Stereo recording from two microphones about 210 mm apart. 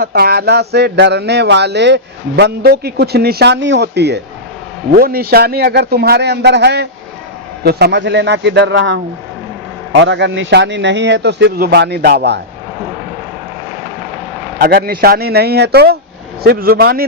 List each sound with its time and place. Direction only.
0.0 s speech: 50° right (ahead or behind)
10.0 s speech: 55° right (ahead or behind)
14.6 s speech: 50° right (ahead or behind)